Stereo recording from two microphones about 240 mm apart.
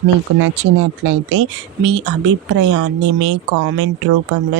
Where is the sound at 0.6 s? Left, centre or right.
Right.